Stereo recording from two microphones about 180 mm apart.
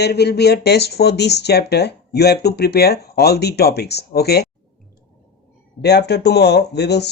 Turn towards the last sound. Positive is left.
turn(degrees=65)  # may be behind; listen again after turning